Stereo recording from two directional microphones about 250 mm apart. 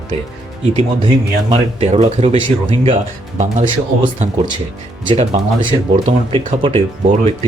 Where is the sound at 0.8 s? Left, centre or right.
Right.